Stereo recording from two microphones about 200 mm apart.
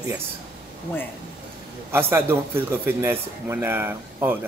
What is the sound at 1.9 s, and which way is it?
A man's voice, 10° right (ahead or behind).